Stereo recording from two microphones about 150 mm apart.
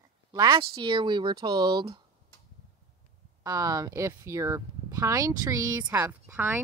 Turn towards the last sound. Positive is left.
turn(degrees=-15)  # may be behind; listen again after turning